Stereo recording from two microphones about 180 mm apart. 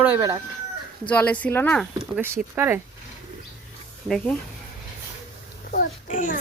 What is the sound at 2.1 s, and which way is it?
Speech, 15° right (ahead or behind).